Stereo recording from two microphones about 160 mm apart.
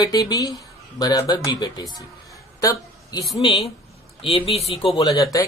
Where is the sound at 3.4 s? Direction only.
35° left (ahead or behind).